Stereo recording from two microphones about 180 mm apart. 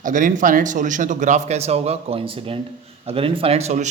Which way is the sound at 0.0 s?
45° right (ahead or behind).